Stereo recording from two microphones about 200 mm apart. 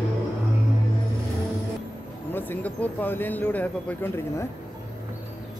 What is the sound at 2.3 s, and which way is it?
Speech, 10° left (ahead or behind).